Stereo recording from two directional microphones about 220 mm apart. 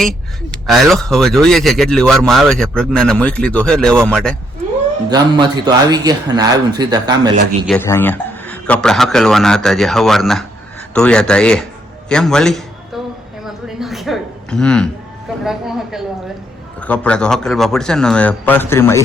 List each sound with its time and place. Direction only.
0.7 s speech: centre (ahead or behind)
5.0 s a man's voice: 20° right (ahead or behind)
7.7 s speech: 10° left (ahead or behind)
13.4 s a sound: centre (ahead or behind)
15.4 s speech: centre (ahead or behind)